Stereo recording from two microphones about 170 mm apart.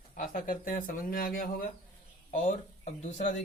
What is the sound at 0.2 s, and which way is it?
Speech, 55° left (ahead or behind).